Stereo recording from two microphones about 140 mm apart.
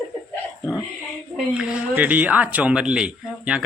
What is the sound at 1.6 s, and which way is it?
Speech, 10° right (ahead or behind).